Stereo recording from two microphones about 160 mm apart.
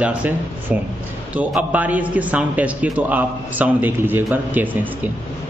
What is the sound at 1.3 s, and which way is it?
A man's voice, 10° right (ahead or behind).